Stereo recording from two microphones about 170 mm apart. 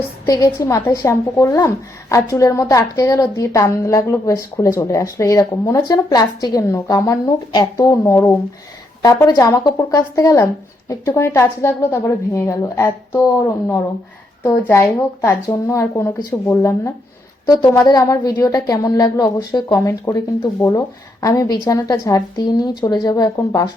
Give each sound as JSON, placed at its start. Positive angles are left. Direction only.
{"t": 0.3, "sound": "a woman's voice", "side_deg": 20}